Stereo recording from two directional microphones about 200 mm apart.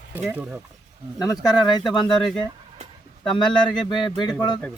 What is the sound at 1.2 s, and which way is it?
Speech, 20° left (ahead or behind).